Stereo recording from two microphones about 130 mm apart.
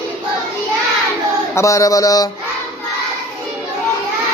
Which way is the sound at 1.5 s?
25° left (ahead or behind).